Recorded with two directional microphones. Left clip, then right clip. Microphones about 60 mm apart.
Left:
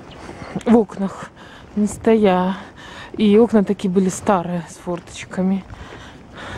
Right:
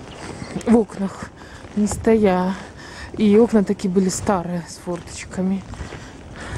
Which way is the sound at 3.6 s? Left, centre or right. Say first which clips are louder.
Left 1 dB; left.